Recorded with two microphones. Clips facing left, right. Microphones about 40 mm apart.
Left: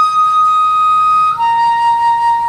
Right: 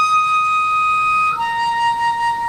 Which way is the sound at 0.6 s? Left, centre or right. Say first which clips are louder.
Left 5 dB; centre.